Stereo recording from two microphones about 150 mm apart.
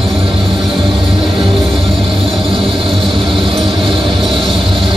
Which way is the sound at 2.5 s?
35° right (ahead or behind).